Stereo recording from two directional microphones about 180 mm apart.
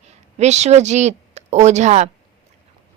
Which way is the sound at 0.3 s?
40° right (ahead or behind).